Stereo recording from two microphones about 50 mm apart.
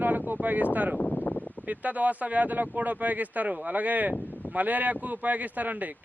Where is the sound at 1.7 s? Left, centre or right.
Right.